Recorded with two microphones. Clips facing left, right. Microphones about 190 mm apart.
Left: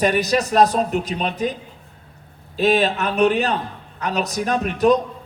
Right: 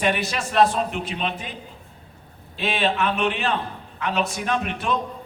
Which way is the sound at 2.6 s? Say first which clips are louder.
Left 5 dB; 40° left (ahead or behind).